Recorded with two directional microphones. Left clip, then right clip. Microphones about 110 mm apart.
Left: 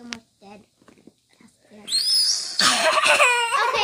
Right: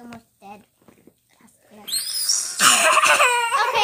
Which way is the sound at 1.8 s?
25° left (ahead or behind).